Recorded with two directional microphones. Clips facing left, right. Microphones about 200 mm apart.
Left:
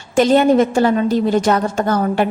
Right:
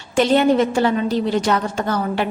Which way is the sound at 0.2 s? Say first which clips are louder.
Left 3 dB; 45° left (ahead or behind).